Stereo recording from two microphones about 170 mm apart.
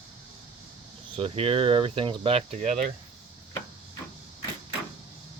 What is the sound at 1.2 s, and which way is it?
Speech, 35° right (ahead or behind).